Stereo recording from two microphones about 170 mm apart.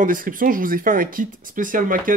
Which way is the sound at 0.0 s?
55° right (ahead or behind).